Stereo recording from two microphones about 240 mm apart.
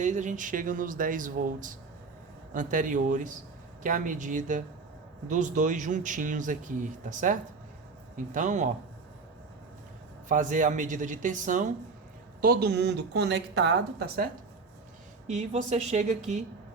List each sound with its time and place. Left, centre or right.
0.0 s speech: right
10.2 s a woman's voice: right
15.3 s speech: right